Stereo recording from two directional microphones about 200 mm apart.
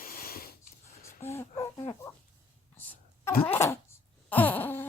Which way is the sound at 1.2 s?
15° left (ahead or behind).